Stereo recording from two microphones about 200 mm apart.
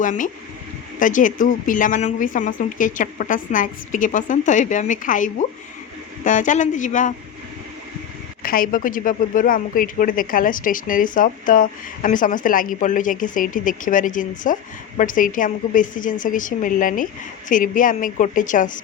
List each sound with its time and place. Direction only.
0.0 s speech: 40° left (ahead or behind)
8.4 s speech: 45° left (ahead or behind)